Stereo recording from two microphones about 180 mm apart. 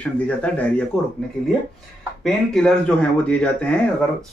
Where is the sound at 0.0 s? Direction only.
10° left (ahead or behind).